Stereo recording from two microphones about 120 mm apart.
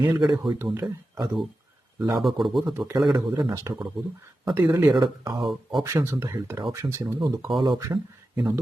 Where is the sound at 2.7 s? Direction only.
20° right (ahead or behind).